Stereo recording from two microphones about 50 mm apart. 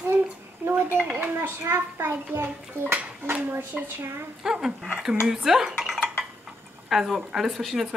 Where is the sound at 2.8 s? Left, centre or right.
Right.